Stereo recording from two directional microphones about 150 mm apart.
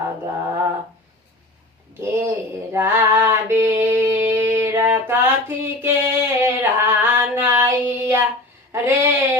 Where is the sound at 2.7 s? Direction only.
15° right (ahead or behind).